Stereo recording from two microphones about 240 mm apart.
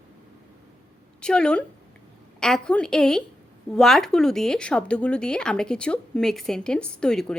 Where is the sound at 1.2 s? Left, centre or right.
Centre.